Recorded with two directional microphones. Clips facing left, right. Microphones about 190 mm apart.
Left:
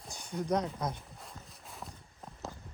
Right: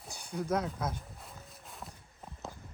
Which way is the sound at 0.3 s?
5° right (ahead or behind).